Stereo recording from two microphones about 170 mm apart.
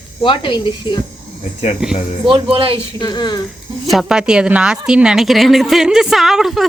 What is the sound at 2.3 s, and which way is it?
Speech, 30° right (ahead or behind).